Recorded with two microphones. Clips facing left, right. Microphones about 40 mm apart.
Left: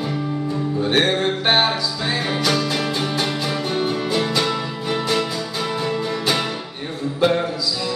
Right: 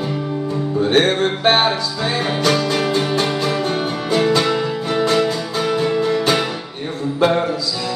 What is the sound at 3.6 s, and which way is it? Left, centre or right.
Music, right.